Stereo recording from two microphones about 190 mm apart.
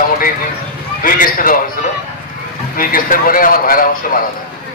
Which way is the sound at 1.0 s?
45° left (ahead or behind).